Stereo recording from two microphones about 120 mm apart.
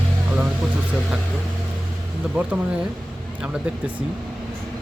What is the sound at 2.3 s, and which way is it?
Speech, 15° right (ahead or behind).